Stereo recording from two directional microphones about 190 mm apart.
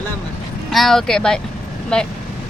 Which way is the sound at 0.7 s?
Centre (ahead or behind).